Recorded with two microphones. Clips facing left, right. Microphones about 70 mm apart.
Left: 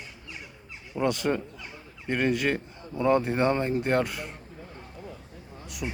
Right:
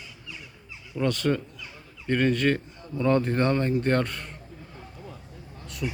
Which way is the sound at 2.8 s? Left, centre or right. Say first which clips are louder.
Even; left.